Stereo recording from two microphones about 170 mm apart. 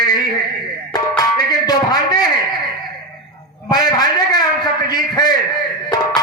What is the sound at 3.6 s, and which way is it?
A man's voice, 25° left (ahead or behind).